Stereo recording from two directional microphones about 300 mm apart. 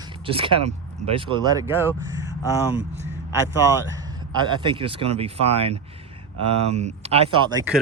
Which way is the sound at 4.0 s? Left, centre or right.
Centre.